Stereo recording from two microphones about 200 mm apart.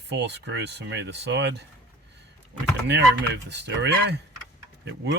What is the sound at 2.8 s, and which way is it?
Speech, 60° right (ahead or behind).